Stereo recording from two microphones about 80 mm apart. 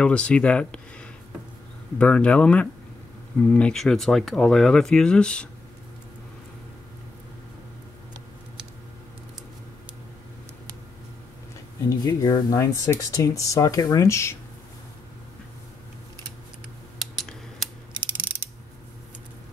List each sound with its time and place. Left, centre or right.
0.0 s speech: centre
2.0 s speech: centre
3.7 s speech: centre
11.9 s speech: left
12.5 s speech: left
14.0 s speech: left
17.2 s scissors: centre